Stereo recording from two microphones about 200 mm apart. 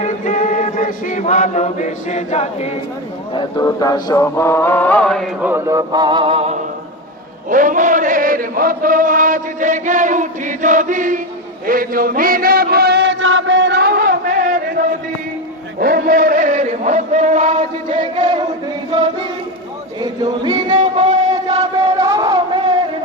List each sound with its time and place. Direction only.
0.0 s chant: 40° left (ahead or behind)
3.3 s chant: 15° left (ahead or behind)
5.4 s a sound: 10° right (ahead or behind); by 6.6 s 30° right (ahead or behind)
7.5 s chant: 40° right (ahead or behind)
11.6 s a sound: 45° right (ahead or behind)
15.8 s chant: 50° right (ahead or behind); by 18.4 s 25° right (ahead or behind)
20.0 s singing: 20° right (ahead or behind)
20.7 s music: 30° right (ahead or behind)
21.2 s chant: 20° right (ahead or behind)
21.8 s a sound: 15° right (ahead or behind)